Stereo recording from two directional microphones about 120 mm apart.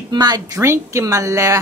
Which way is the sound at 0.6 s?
25° right (ahead or behind).